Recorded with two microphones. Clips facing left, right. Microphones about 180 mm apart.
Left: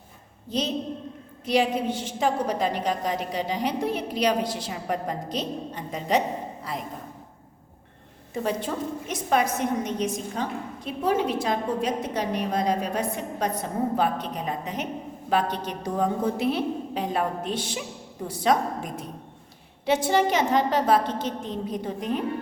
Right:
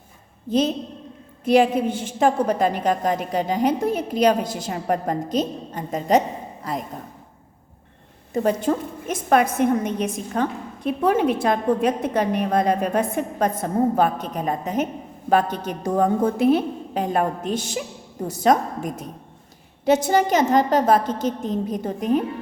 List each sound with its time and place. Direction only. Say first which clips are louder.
0.5 s a woman's voice: right 6 dB; 50° right (ahead or behind)
8.3 s a woman's voice: right 7 dB; 45° right (ahead or behind)